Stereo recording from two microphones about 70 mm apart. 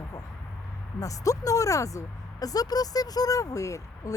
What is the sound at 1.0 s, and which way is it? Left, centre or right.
Speech, left.